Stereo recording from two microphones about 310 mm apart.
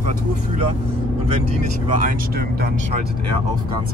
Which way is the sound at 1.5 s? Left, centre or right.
Right.